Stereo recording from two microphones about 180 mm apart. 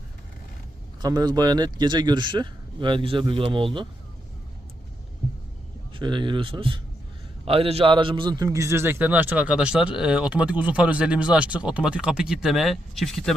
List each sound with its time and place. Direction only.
1.0 s speech: 20° right (ahead or behind)
5.9 s a man's voice: 25° right (ahead or behind); by 13.3 s centre (ahead or behind)